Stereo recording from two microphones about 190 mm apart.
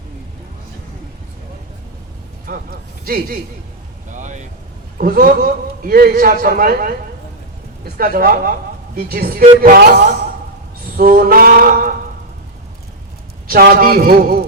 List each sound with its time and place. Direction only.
2.5 s a man's voice: 50° right (ahead or behind)
4.1 s vehicle: 40° right (ahead or behind)
4.9 s a man's voice: 50° right (ahead or behind)
7.9 s a man's voice: 50° right (ahead or behind)
10.9 s a sound: 50° right (ahead or behind)
13.5 s a man's voice: 50° right (ahead or behind)